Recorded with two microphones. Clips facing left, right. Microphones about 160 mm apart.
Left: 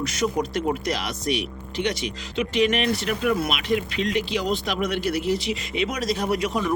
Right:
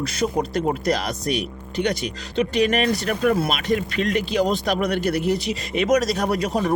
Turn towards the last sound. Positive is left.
turn(degrees=-40)  # may be behind; listen again after turning